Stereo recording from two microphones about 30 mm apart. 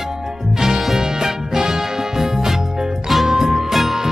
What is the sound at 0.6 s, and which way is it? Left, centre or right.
Music, centre.